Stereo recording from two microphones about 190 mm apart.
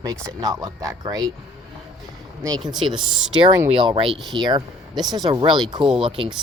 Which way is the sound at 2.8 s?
30° right (ahead or behind).